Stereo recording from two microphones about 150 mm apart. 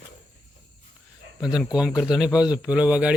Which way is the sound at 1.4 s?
5° right (ahead or behind).